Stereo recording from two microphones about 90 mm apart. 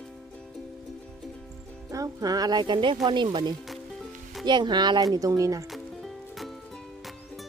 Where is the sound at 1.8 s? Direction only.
40° right (ahead or behind); by 3.6 s 60° right (ahead or behind).